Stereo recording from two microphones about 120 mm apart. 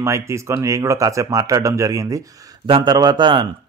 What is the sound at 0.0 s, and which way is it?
Speech, 25° right (ahead or behind).